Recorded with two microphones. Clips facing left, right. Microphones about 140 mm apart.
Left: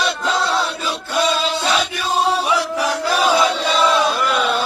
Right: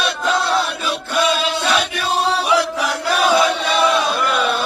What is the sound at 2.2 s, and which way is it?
Chant, 75° right (ahead or behind).